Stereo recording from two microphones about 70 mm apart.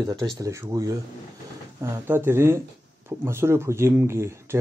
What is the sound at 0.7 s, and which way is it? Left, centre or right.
Speech, right.